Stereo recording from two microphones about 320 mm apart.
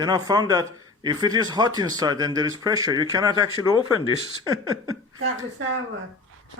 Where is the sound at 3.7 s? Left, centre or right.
Centre.